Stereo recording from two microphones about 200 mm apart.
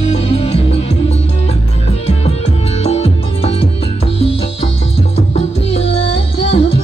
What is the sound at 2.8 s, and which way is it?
Music, 30° left (ahead or behind).